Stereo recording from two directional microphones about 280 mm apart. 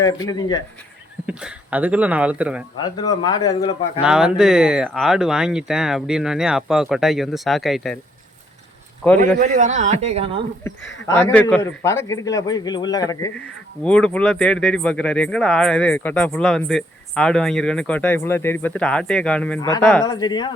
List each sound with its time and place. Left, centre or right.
0.0 s a man's voice: centre
1.3 s speech: centre
2.7 s a man's voice: centre
4.0 s speech: centre
9.1 s a man's voice: right
11.0 s a man's voice: centre
20.1 s a man's voice: centre